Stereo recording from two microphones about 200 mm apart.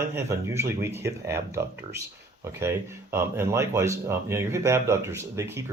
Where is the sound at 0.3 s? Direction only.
15° right (ahead or behind).